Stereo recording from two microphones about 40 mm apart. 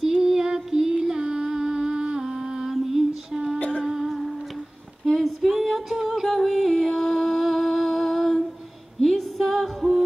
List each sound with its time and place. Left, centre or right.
0.2 s music: centre
2.7 s music: centre
3.5 s a sound: left
3.8 s music: centre
5.0 s music: centre